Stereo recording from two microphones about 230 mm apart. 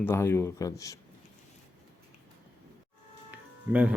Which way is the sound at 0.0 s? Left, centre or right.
Centre.